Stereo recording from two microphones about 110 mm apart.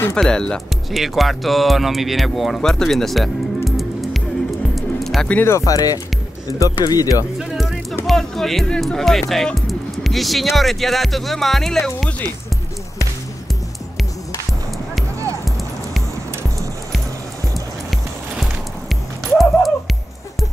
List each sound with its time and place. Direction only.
0.1 s speech: 5° left (ahead or behind)
4.7 s music: centre (ahead or behind)
5.4 s speech: 25° left (ahead or behind)
7.3 s music: 5° right (ahead or behind)
8.1 s speech: centre (ahead or behind)
18.4 s music: centre (ahead or behind)